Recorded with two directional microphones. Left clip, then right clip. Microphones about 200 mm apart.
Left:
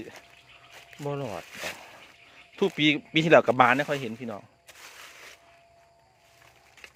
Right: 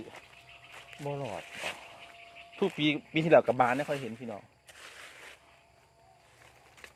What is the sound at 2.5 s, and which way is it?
Speech, 35° left (ahead or behind).